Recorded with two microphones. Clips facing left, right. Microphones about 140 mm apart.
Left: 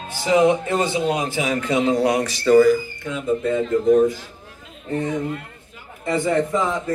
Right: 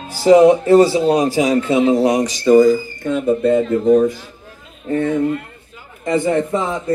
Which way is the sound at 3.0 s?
55° right (ahead or behind).